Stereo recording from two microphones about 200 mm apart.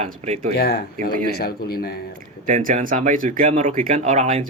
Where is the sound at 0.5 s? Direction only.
50° left (ahead or behind).